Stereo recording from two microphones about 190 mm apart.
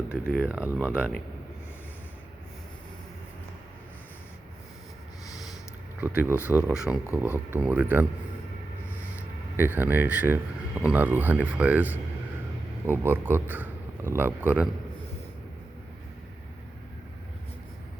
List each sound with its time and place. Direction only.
0.1 s speech: 5° right (ahead or behind)
5.2 s a sound: 20° left (ahead or behind)
6.0 s speech: 10° right (ahead or behind)
9.6 s speech: 10° right (ahead or behind)